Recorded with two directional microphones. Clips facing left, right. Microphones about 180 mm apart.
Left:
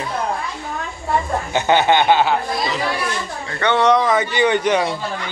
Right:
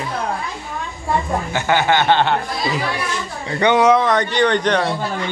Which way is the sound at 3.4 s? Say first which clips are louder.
Right 2 dB; 15° right (ahead or behind).